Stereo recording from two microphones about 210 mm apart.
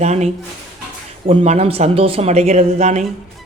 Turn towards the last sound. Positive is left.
turn(degrees=-30)  # may be behind; listen again after turning